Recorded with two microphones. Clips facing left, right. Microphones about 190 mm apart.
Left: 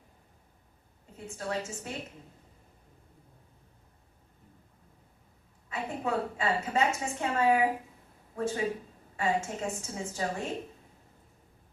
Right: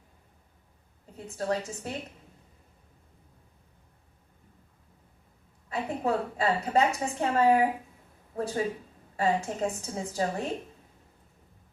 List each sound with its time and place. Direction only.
1.1 s a woman's voice: 35° right (ahead or behind)
5.6 s a woman's voice: 35° right (ahead or behind)